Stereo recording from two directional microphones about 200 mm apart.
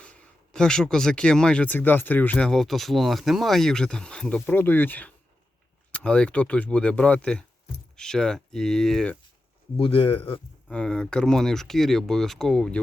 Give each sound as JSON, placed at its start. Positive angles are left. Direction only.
{"t": 0.0, "sound": "speech", "side_deg": 5}
{"t": 9.7, "sound": "speech", "side_deg": 25}
{"t": 10.7, "sound": "speech", "side_deg": 5}